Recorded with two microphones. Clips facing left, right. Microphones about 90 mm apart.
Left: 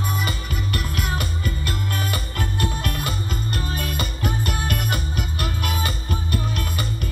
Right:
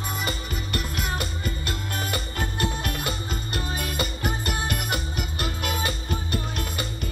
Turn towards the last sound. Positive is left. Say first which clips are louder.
# left 3 dB
turn(degrees=50)  # may be behind; listen again after turning